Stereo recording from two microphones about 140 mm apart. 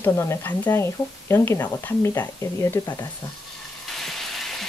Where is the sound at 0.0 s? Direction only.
15° left (ahead or behind).